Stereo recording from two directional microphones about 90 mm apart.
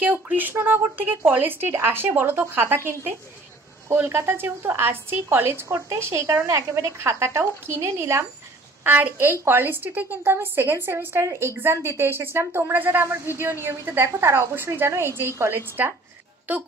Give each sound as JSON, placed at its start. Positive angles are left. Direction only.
{"t": 0.0, "sound": "a woman's voice", "side_deg": -20}
{"t": 8.8, "sound": "a woman's voice", "side_deg": -20}